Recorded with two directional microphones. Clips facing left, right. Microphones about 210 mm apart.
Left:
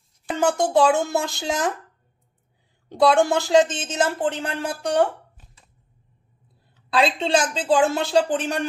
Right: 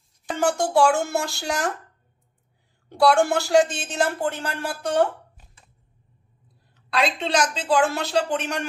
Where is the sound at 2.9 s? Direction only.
20° left (ahead or behind).